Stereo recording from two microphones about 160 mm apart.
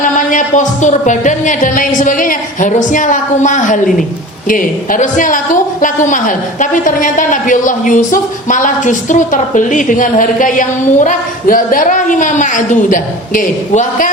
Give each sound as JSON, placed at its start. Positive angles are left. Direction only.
{"t": 0.0, "sound": "a woman's voice", "side_deg": 55}